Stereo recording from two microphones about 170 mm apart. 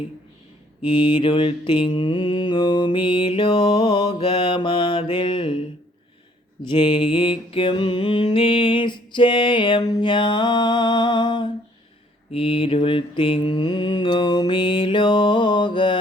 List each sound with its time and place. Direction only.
0.8 s mantra: 30° left (ahead or behind)
6.7 s mantra: 30° left (ahead or behind)